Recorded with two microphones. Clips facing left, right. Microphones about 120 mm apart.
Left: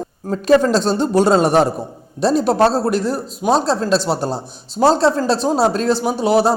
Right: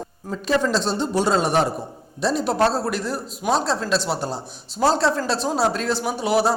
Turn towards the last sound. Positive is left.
turn(degrees=25)  # may be behind; listen again after turning